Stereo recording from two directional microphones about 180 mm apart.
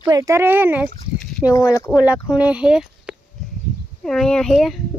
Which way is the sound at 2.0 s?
5° right (ahead or behind).